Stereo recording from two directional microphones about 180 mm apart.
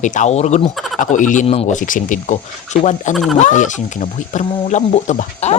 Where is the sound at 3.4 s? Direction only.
45° left (ahead or behind).